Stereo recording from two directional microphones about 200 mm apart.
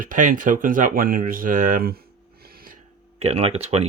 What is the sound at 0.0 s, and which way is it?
Speech, 40° right (ahead or behind).